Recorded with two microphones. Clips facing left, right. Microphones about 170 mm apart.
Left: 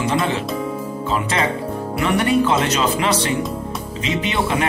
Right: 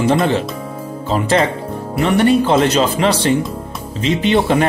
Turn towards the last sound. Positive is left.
turn(degrees=-35)  # may be behind; listen again after turning